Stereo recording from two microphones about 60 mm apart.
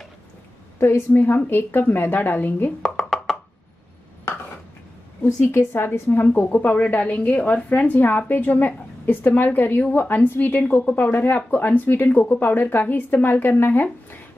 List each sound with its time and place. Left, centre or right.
0.7 s a woman's voice: left
2.8 s a sound: centre
5.2 s a woman's voice: left